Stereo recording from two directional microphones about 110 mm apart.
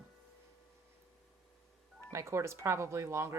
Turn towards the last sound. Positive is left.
turn(degrees=-25)  # may be behind; listen again after turning